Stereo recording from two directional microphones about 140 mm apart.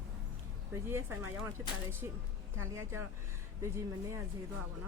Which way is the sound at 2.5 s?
20° right (ahead or behind).